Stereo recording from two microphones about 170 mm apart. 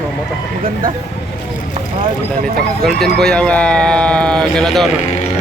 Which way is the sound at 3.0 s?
5° left (ahead or behind).